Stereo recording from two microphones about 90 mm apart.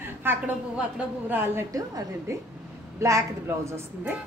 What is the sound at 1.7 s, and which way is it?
Speech, 40° right (ahead or behind).